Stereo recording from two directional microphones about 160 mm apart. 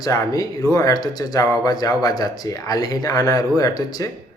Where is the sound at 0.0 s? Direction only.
20° left (ahead or behind).